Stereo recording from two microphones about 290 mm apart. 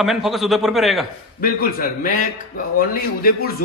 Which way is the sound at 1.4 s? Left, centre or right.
Left.